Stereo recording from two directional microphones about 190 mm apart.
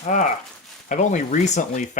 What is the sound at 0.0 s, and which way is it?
Speech, 40° left (ahead or behind).